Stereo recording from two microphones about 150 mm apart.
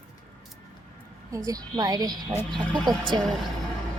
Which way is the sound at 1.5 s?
25° right (ahead or behind).